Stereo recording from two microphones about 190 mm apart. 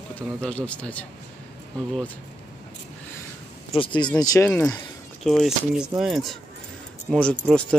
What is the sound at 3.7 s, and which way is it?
Speech, 25° left (ahead or behind).